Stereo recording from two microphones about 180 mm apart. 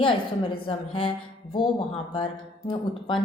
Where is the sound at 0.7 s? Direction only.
30° left (ahead or behind).